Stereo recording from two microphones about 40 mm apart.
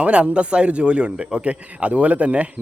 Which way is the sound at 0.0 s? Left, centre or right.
Right.